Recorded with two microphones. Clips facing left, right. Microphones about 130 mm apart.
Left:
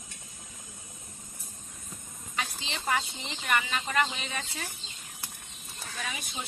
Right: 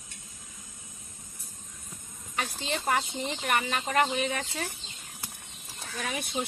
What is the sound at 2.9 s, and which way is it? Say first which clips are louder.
Speech: right 1 dB; 45° right (ahead or behind).